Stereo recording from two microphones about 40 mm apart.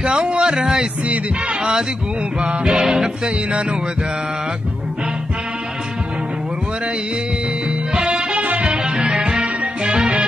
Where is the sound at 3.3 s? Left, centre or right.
Right.